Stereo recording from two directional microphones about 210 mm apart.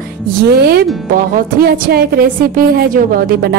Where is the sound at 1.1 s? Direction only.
45° right (ahead or behind).